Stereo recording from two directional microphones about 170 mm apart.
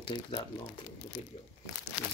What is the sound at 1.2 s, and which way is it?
Speech, 40° left (ahead or behind).